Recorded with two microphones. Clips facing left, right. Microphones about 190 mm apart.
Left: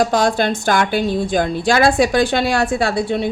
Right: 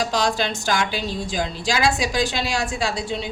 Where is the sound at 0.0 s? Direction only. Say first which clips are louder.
Left 6 dB; 55° left (ahead or behind).